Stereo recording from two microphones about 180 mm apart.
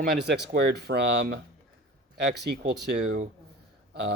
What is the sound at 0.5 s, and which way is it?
Speech, 65° right (ahead or behind).